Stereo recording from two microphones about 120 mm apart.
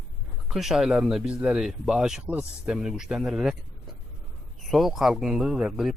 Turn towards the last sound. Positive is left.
turn(degrees=-5)  # may be behind; listen again after turning